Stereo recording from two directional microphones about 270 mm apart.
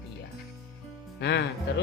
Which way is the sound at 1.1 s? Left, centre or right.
Left.